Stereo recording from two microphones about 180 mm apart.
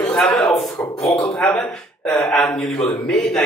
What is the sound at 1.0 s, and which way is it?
Speech, 20° left (ahead or behind).